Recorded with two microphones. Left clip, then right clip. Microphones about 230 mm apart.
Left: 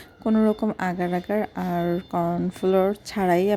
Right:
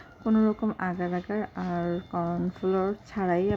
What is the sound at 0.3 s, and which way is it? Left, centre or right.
A woman's voice, left.